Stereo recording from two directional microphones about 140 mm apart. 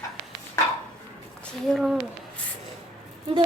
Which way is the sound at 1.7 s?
5° left (ahead or behind).